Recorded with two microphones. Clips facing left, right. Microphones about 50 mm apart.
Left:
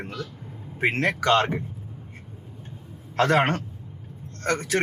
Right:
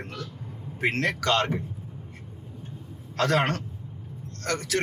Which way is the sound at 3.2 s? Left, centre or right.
Left.